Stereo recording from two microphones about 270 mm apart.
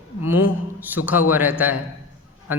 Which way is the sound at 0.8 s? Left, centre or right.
Centre.